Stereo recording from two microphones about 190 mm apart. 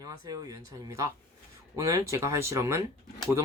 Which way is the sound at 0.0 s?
20° right (ahead or behind).